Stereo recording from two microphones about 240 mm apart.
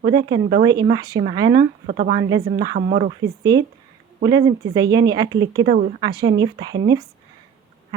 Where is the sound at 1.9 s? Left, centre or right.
Right.